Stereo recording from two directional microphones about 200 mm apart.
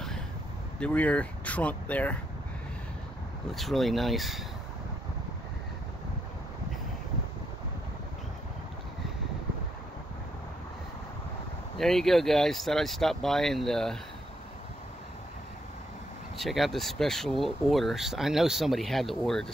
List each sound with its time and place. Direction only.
0.7 s speech: 5° left (ahead or behind)
3.5 s speech: centre (ahead or behind)
11.8 s speech: centre (ahead or behind)
16.3 s speech: centre (ahead or behind)